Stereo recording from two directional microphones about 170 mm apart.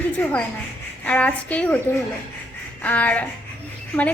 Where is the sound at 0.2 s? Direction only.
10° left (ahead or behind).